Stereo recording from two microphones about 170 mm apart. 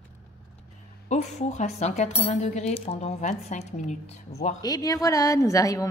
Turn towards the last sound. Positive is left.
turn(degrees=20)  # may be behind; listen again after turning